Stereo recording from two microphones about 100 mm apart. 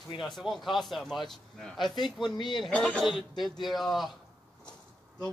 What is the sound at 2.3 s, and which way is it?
Speech, 50° left (ahead or behind).